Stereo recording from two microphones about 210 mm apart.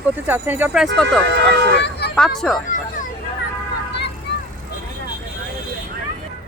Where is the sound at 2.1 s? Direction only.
Centre (ahead or behind).